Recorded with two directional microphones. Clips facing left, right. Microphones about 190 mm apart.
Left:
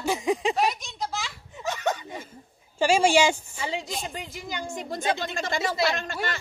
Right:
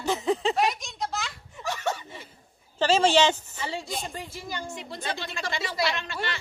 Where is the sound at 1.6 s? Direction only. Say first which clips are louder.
Left 2 dB; 20° left (ahead or behind).